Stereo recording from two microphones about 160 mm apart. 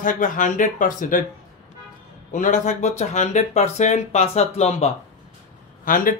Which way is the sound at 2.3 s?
50° left (ahead or behind).